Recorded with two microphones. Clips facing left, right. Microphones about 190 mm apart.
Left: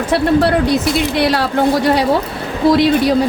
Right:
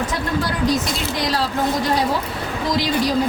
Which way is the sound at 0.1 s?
70° left (ahead or behind).